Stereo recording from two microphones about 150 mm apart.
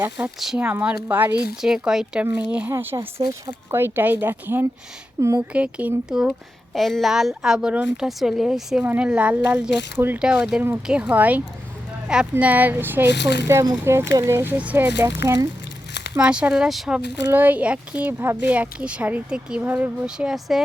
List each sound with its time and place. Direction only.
0.3 s a woman's voice: 5° right (ahead or behind)
16.1 s a woman's voice: 5° right (ahead or behind)